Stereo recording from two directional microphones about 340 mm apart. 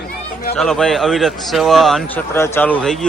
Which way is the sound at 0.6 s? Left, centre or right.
Centre.